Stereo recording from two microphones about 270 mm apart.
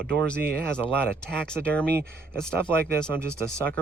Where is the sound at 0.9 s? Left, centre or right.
Centre.